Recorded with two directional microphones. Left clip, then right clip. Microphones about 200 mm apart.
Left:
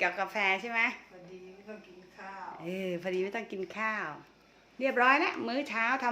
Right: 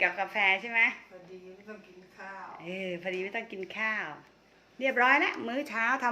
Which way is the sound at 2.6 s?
25° left (ahead or behind).